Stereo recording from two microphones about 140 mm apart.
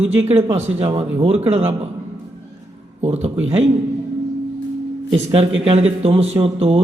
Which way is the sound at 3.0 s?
45° right (ahead or behind).